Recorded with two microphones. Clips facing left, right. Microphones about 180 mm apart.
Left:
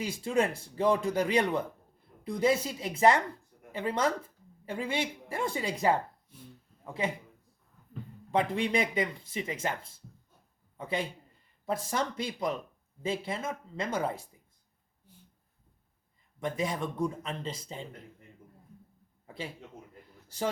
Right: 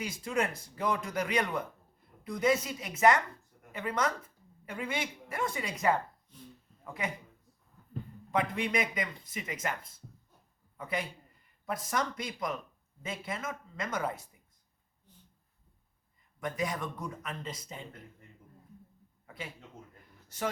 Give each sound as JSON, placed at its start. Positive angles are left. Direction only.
{"t": 0.0, "sound": "speech", "side_deg": 30}
{"t": 8.3, "sound": "speech", "side_deg": 30}
{"t": 15.1, "sound": "a sound", "side_deg": 10}
{"t": 16.4, "sound": "speech", "side_deg": 25}
{"t": 20.2, "sound": "a man's voice", "side_deg": 30}